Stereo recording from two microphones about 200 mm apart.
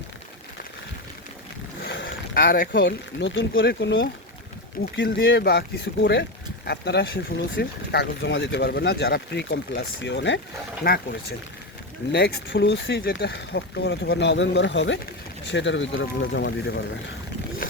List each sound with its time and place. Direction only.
1.8 s boat: 50° left (ahead or behind)
2.8 s speech: 65° left (ahead or behind)
10.8 s speech: 50° left (ahead or behind)